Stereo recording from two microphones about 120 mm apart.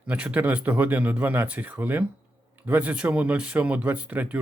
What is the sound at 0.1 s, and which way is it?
Speech, 10° right (ahead or behind).